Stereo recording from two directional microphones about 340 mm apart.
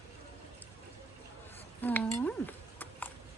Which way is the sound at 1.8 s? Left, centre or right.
Centre.